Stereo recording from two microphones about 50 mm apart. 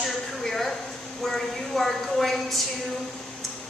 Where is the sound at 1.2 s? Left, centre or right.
Centre.